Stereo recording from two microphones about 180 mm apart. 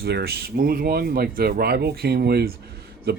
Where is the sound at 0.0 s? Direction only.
60° right (ahead or behind).